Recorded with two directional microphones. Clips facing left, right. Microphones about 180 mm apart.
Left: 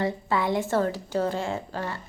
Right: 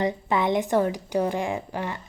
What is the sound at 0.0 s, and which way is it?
A woman's voice, 20° right (ahead or behind).